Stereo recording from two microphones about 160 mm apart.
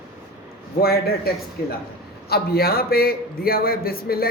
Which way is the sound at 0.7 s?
70° left (ahead or behind).